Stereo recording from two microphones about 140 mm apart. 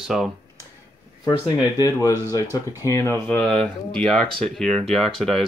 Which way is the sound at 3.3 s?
5° left (ahead or behind).